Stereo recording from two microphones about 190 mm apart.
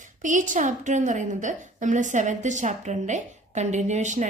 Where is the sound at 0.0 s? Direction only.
40° right (ahead or behind).